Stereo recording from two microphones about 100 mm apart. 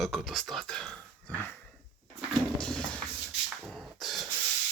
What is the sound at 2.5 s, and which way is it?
Music, 10° left (ahead or behind).